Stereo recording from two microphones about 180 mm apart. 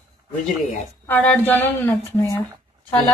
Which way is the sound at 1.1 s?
10° left (ahead or behind).